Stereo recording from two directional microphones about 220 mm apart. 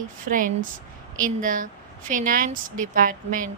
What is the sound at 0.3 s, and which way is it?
A woman's voice, 35° right (ahead or behind).